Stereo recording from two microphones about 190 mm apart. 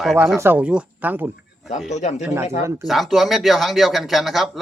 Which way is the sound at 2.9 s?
Centre (ahead or behind).